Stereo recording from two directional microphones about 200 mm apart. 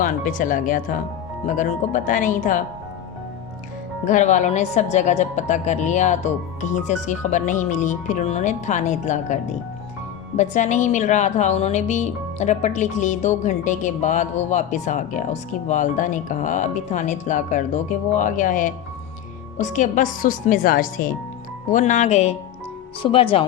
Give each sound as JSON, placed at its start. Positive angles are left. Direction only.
{"t": 0.0, "sound": "a woman's voice", "side_deg": 40}
{"t": 4.0, "sound": "a woman's voice", "side_deg": 40}